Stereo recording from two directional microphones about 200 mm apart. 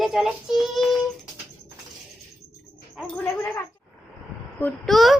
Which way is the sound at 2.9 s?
5° left (ahead or behind).